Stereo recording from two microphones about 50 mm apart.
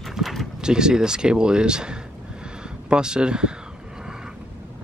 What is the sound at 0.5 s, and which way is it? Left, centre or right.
Speech, centre.